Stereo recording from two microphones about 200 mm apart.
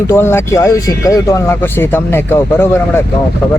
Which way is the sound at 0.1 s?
10° left (ahead or behind).